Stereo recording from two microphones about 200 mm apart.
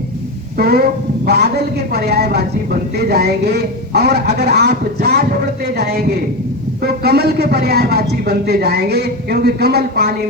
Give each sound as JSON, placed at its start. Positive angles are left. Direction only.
{"t": 0.6, "sound": "speech", "side_deg": -50}